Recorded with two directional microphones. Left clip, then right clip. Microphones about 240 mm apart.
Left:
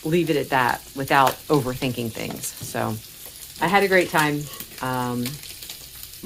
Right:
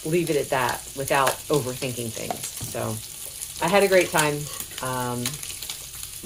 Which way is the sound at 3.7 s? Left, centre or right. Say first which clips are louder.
Even; left.